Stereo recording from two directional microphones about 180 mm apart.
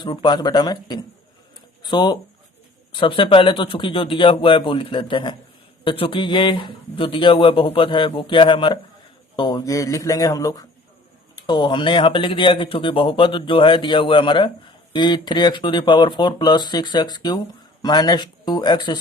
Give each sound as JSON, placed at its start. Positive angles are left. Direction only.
{"t": 0.0, "sound": "speech", "side_deg": 25}